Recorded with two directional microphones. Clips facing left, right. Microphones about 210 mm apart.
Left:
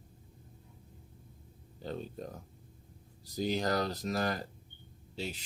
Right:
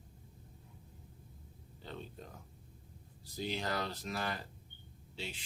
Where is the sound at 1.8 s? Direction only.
40° left (ahead or behind).